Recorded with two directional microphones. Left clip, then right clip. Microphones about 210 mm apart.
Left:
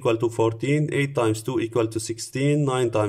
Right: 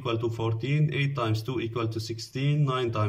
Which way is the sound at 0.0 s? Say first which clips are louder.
Left 8 dB; 45° left (ahead or behind).